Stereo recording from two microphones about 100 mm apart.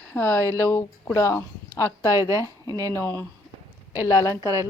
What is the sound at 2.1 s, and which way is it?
Speech, 30° right (ahead or behind).